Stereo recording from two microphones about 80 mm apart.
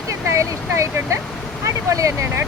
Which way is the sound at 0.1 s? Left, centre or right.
Right.